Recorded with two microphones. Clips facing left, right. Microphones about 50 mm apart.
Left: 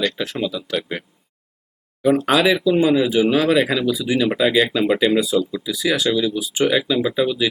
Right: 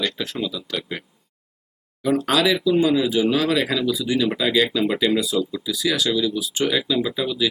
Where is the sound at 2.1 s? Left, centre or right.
Centre.